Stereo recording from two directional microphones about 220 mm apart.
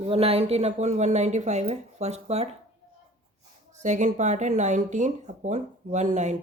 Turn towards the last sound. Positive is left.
turn(degrees=-30)  # may be behind; listen again after turning